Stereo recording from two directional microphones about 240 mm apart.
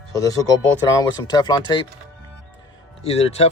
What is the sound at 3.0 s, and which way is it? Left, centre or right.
Speech, left.